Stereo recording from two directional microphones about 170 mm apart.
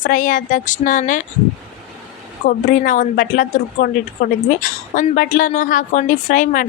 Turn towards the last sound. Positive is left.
turn(degrees=50)  # may be behind; listen again after turning